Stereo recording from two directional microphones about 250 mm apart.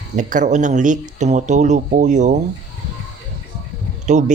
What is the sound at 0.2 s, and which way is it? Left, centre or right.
Speech, right.